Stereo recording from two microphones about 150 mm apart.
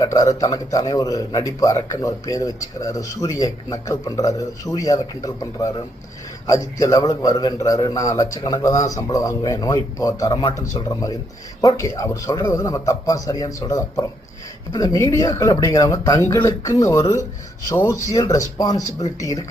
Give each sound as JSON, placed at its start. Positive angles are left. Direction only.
{"t": 0.0, "sound": "a man's voice", "side_deg": 25}